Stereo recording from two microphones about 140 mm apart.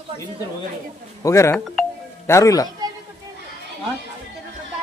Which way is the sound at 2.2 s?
20° left (ahead or behind).